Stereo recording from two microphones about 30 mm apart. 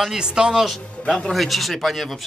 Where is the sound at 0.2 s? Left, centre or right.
Right.